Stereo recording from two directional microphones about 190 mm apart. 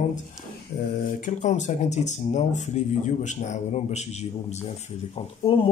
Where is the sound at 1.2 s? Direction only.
40° left (ahead or behind).